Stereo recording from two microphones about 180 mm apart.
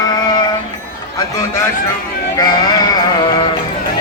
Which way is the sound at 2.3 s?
20° left (ahead or behind).